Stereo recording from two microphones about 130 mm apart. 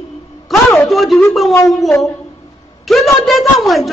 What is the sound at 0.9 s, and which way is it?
Speech, centre (ahead or behind).